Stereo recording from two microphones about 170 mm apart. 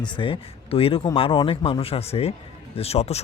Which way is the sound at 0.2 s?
35° left (ahead or behind).